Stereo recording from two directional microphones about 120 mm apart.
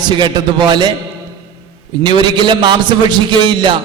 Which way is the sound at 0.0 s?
40° right (ahead or behind).